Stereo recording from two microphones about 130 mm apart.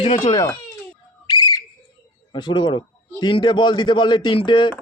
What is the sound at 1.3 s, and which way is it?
Whistle, 30° left (ahead or behind).